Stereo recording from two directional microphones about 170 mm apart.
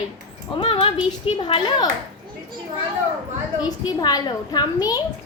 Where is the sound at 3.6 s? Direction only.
20° left (ahead or behind).